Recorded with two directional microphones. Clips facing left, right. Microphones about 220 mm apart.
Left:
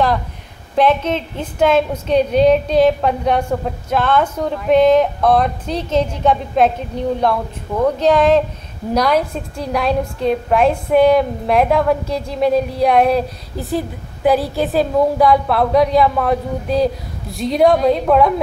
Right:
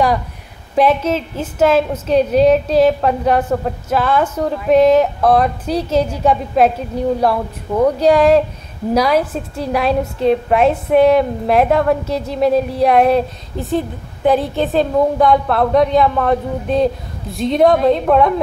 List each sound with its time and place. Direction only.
0.7 s a woman's voice: 5° right (ahead or behind)
7.8 s a woman's voice: 10° right (ahead or behind)